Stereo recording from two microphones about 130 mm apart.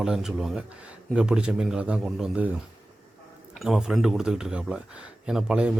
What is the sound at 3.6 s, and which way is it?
Speech, 5° right (ahead or behind).